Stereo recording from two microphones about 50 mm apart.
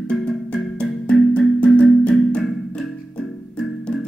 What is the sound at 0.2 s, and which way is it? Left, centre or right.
Music, left.